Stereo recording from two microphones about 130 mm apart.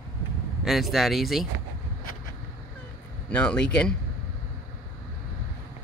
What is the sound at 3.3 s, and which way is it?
Speech, 10° left (ahead or behind).